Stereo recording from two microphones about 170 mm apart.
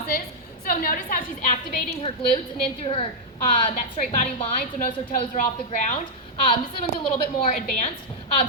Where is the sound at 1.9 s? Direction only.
30° left (ahead or behind).